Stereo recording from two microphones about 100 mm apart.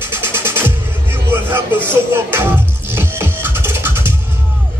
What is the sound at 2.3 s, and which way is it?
Music, 20° right (ahead or behind).